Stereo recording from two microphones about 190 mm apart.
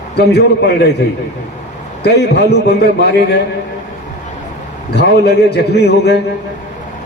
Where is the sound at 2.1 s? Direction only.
60° left (ahead or behind).